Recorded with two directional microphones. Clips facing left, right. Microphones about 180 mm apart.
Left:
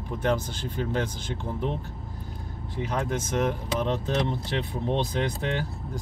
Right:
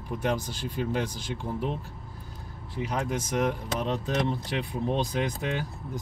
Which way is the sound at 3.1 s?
10° right (ahead or behind).